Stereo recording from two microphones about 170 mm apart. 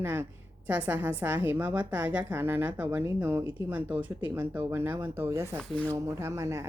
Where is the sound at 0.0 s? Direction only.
15° right (ahead or behind).